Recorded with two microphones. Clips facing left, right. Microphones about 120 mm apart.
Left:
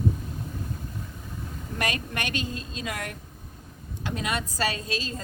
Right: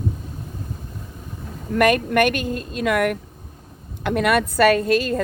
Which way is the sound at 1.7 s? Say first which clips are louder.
Right 14 dB; 60° right (ahead or behind).